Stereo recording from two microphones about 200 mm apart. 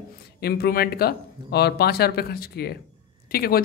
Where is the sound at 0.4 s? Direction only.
50° left (ahead or behind).